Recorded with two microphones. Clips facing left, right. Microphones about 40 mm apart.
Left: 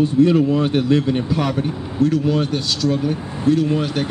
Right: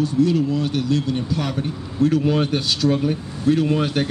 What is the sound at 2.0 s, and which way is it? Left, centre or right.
Speech, centre.